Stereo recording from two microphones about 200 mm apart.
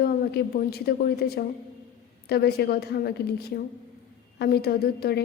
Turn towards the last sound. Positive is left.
turn(degrees=50)  # may be behind; listen again after turning